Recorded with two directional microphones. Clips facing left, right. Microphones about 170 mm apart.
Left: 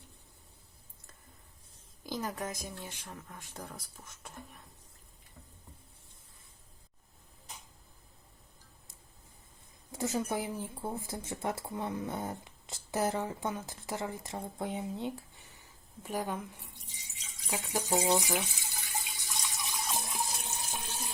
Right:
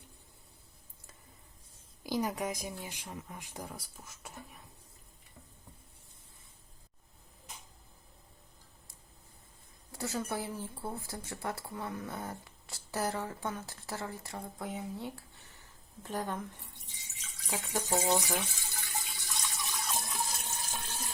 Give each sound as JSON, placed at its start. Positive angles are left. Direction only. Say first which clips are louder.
{"t": 2.0, "sound": "speech", "louder": "right 4 dB", "side_deg": -10}
{"t": 9.9, "sound": "speech", "louder": "left 3 dB", "side_deg": 20}
{"t": 20.7, "sound": "water", "louder": "left 1 dB", "side_deg": 15}